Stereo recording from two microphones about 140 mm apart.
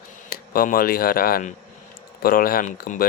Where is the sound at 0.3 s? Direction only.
90° left.